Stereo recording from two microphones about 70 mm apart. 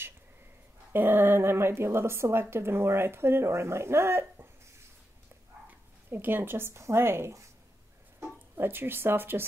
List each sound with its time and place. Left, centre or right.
0.9 s speech: right
6.0 s speech: right
8.5 s speech: right